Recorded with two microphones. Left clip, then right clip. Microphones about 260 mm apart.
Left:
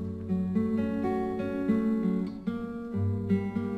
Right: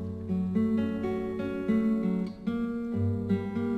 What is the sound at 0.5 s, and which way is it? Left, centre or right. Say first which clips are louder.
Music: right 1 dB; right.